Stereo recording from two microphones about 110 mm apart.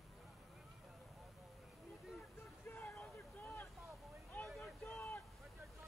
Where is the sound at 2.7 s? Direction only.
15° left (ahead or behind).